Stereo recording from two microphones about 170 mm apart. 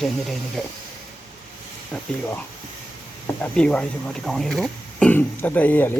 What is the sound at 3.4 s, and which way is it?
Speech, 5° left (ahead or behind).